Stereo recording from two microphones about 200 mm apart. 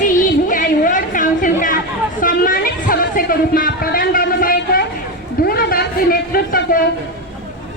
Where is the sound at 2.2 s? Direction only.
45° left (ahead or behind).